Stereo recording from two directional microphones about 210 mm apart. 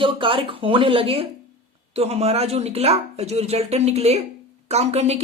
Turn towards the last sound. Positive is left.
turn(degrees=-30)  # may be behind; listen again after turning